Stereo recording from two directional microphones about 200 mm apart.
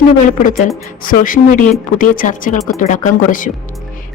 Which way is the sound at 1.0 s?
45° left (ahead or behind).